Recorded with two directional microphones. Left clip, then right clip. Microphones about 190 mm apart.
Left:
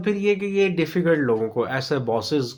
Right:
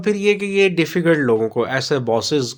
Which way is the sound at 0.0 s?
40° right (ahead or behind).